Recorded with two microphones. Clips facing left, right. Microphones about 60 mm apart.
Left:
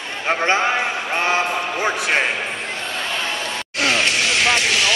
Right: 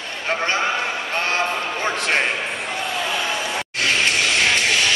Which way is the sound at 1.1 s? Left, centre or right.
Centre.